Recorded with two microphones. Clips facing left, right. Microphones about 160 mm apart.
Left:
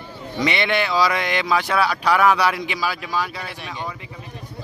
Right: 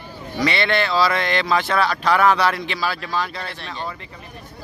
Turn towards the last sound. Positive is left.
turn(degrees=15)  # may be behind; listen again after turning